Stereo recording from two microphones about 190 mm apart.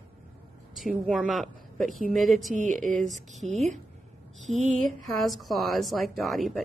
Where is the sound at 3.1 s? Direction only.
40° right (ahead or behind).